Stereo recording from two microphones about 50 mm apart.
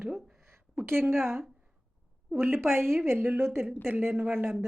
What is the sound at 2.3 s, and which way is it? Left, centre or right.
Speech, right.